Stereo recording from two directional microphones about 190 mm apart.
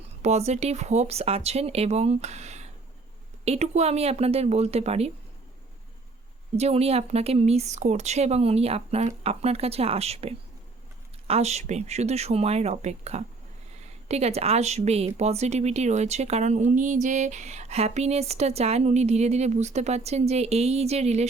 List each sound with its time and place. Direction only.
0.2 s speech: 35° right (ahead or behind)
6.6 s speech: 35° right (ahead or behind)